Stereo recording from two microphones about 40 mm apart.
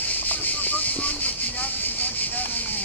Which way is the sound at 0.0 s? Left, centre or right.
Left.